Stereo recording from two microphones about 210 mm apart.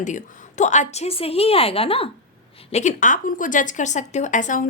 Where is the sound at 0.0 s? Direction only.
35° left (ahead or behind).